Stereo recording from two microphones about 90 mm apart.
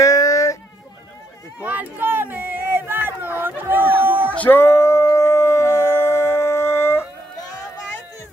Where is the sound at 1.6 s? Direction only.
20° right (ahead or behind).